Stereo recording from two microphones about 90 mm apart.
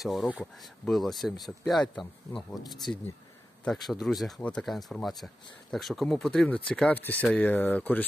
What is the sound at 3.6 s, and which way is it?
Speech, 5° left (ahead or behind).